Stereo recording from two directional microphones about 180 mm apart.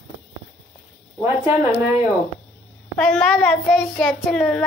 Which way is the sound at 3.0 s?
Centre (ahead or behind).